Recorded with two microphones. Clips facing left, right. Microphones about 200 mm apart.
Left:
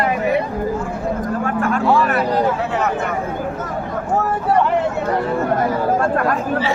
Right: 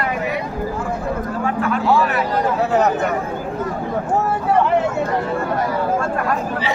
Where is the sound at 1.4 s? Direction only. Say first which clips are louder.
Even; 50° left (ahead or behind).